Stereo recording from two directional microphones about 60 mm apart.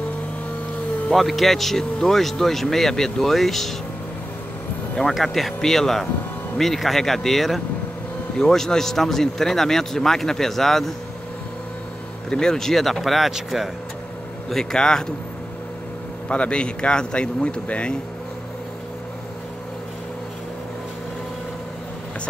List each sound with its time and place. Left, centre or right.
1.1 s speech: centre
4.9 s a man's voice: centre
12.3 s speech: centre
14.5 s a man's voice: centre
16.3 s a man's voice: centre